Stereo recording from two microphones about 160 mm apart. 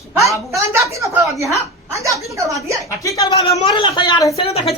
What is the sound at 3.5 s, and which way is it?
Speech, 35° left (ahead or behind).